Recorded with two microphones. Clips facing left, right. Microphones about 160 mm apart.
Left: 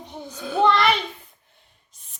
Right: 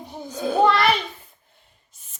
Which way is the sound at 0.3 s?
45° right (ahead or behind).